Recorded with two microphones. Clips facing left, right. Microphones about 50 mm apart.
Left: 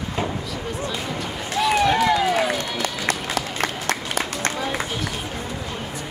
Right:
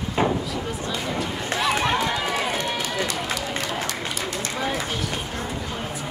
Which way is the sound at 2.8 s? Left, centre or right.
Left.